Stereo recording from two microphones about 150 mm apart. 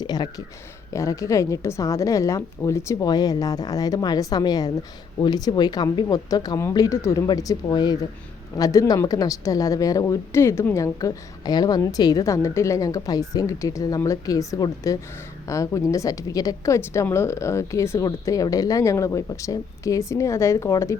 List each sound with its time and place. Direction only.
0.0 s a woman's voice: 25° left (ahead or behind)